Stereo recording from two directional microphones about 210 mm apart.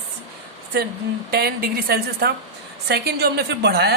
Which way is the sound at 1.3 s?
45° right (ahead or behind).